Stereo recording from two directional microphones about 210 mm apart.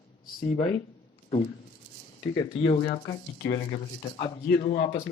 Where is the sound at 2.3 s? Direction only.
25° left (ahead or behind).